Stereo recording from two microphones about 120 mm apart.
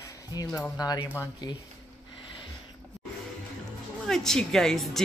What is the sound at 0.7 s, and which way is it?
Speech, 35° left (ahead or behind).